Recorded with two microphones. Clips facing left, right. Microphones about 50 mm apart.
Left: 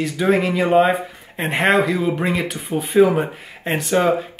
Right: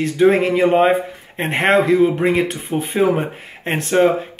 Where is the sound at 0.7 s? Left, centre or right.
Centre.